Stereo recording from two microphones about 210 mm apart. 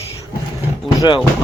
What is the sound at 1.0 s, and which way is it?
Speech, 20° left (ahead or behind).